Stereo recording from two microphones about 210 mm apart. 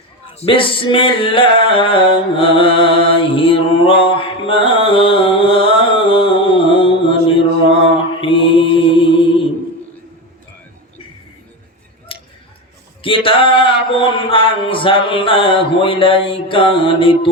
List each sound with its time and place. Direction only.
0.3 s music: 25° left (ahead or behind)
8.2 s mantra: 25° left (ahead or behind)
13.0 s male singing: 25° left (ahead or behind)